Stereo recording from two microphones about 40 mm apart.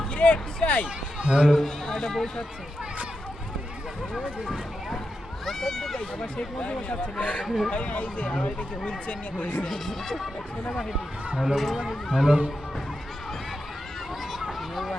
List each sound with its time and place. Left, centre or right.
0.2 s speech: left
1.5 s a man's voice: centre
5.5 s speech: centre
6.6 s speech: left
7.4 s speech: centre
7.7 s speech: left
9.6 s speech: centre
11.4 s speech: centre
12.1 s speech: centre